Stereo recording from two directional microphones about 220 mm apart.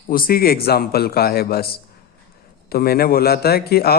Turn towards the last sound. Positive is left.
turn(degrees=45)  # may be behind; listen again after turning